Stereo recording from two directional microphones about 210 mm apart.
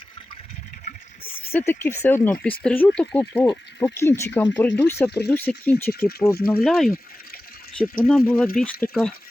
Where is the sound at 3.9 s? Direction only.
10° left (ahead or behind).